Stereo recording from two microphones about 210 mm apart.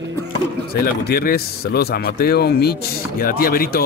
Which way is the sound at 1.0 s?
45° left (ahead or behind).